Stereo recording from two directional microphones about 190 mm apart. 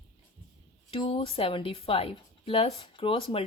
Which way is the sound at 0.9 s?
25° left (ahead or behind).